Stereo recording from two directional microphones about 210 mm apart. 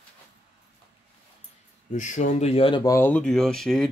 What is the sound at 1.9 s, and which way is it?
Speech, 35° left (ahead or behind).